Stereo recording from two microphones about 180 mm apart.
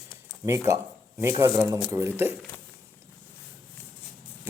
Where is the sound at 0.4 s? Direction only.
15° right (ahead or behind).